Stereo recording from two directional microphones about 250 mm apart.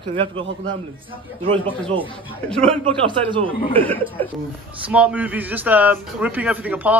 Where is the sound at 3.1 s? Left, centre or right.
Centre.